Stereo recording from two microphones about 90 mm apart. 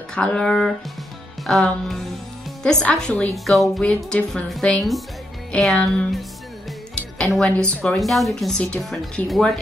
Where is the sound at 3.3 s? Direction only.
Centre (ahead or behind).